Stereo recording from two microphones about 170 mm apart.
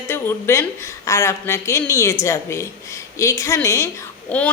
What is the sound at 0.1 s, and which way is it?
Speech, 15° left (ahead or behind).